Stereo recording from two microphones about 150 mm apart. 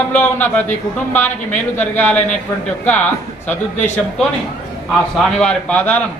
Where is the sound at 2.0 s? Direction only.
10° left (ahead or behind).